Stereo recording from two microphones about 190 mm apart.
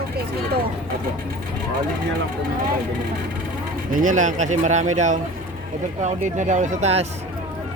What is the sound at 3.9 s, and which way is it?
Speech, 40° right (ahead or behind).